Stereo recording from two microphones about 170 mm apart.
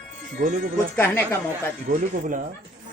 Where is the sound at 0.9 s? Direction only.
10° left (ahead or behind).